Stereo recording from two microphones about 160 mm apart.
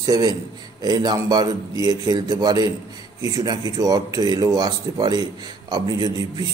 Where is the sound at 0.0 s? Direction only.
25° right (ahead or behind).